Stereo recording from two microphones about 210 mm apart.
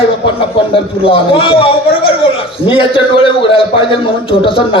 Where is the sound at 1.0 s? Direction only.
25° left (ahead or behind).